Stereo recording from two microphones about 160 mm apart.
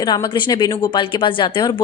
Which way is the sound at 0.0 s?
30° left (ahead or behind).